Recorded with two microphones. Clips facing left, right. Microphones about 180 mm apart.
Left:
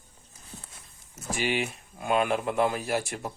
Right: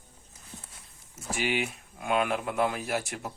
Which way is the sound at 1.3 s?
5° right (ahead or behind).